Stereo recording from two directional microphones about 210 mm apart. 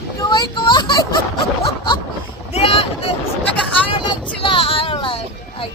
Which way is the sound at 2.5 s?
30° left (ahead or behind).